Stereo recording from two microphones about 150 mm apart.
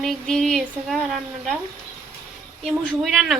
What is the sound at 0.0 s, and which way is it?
Speech, 5° left (ahead or behind).